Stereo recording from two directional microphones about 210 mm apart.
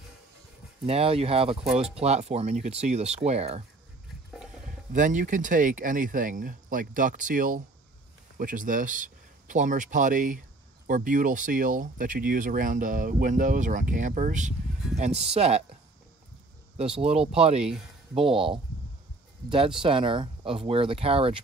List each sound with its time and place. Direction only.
0.8 s speech: 30° right (ahead or behind)
1.6 s speech: centre (ahead or behind)
2.0 s speech: 30° right (ahead or behind)
4.6 s speech: 35° right (ahead or behind)
16.7 s speech: 30° right (ahead or behind)
19.8 s speech: 25° right (ahead or behind)